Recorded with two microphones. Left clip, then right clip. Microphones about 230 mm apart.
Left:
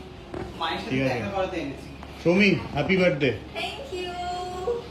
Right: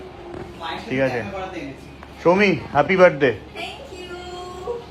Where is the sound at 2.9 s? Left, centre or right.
Centre.